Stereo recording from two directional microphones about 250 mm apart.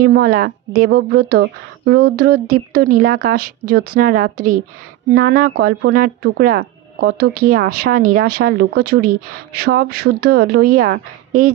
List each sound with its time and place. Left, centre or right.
0.0 s speech: right